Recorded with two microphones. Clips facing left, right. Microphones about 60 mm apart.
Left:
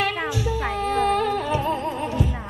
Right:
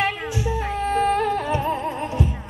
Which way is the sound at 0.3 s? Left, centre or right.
Right.